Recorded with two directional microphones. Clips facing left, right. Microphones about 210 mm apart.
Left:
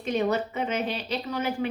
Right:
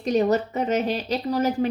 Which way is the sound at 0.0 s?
40° right (ahead or behind).